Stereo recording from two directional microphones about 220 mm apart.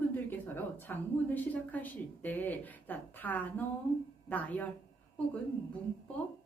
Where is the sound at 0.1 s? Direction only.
10° left (ahead or behind).